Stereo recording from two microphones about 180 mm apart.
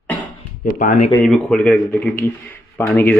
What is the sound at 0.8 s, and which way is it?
Speech, 45° left (ahead or behind).